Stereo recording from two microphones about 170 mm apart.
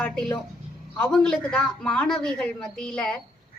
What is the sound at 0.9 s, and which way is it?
A woman's voice, 5° left (ahead or behind).